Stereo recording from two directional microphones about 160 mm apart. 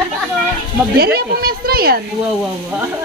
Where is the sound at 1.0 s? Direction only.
70° right (ahead or behind).